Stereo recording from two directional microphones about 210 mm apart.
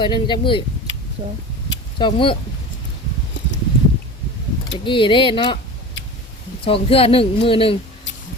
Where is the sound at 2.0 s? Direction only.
25° left (ahead or behind).